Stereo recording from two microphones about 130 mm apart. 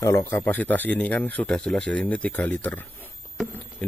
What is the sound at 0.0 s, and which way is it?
Speech, 20° left (ahead or behind).